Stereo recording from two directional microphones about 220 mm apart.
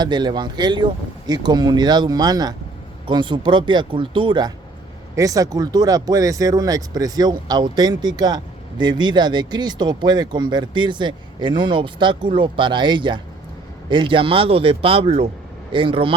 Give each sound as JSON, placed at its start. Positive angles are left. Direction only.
{"t": 0.0, "sound": "speech", "side_deg": -20}